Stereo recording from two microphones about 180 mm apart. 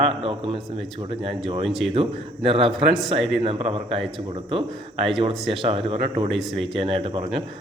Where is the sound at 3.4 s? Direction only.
30° right (ahead or behind).